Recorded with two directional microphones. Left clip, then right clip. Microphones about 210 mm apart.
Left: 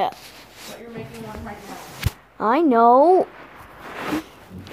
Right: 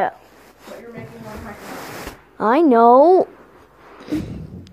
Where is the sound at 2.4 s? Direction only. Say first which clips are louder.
Right 3 dB; 20° right (ahead or behind).